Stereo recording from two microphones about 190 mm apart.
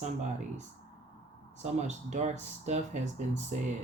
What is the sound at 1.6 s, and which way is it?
Speech, 35° right (ahead or behind).